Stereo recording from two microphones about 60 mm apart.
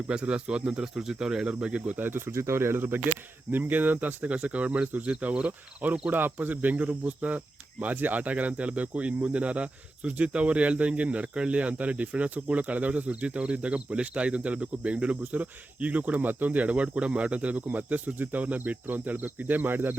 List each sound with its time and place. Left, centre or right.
0.1 s speech: centre
2.0 s speech: right